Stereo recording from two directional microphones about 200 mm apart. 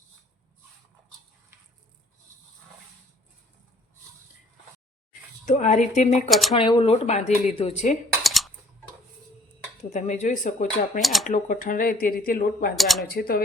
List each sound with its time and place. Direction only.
5.5 s speech: 35° left (ahead or behind)
6.5 s speech: 25° left (ahead or behind)
8.2 s typing: centre (ahead or behind)
9.9 s speech: 35° left (ahead or behind)
11.0 s speech: centre (ahead or behind)
11.3 s speech: 40° left (ahead or behind)
12.7 s speech: centre (ahead or behind)
13.0 s speech: 50° left (ahead or behind)